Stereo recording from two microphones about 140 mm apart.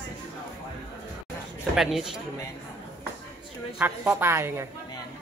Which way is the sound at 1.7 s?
5° right (ahead or behind).